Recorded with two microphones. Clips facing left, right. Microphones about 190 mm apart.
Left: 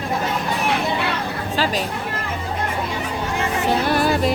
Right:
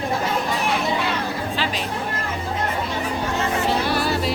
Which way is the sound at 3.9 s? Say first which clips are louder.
Left 4 dB; 50° left (ahead or behind).